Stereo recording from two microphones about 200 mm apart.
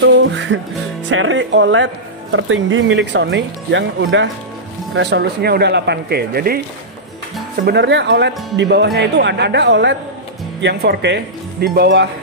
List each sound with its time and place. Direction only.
0.2 s music: 65° right (ahead or behind)
1.0 s speech: 70° right (ahead or behind); by 6.6 s 50° right (ahead or behind)
7.6 s speech: 60° right (ahead or behind)